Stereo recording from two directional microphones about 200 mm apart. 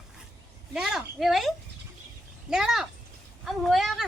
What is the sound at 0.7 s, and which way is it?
A woman's voice, centre (ahead or behind).